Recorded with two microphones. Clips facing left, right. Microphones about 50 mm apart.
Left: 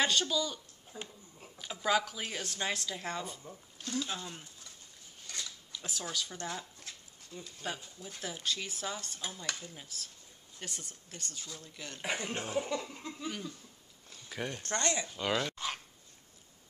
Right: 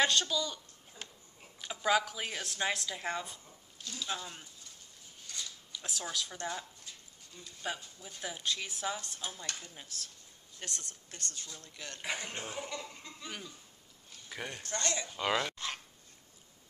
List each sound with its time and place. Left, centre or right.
0.0 s speech: centre
1.6 s speech: centre
3.4 s speech: left
5.7 s a sound: centre
6.1 s speech: centre
14.3 s speech: centre
14.8 s speech: left
15.0 s speech: centre
15.5 s a sound: centre